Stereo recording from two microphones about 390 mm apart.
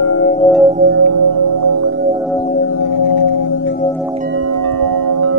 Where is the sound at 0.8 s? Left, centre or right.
Right.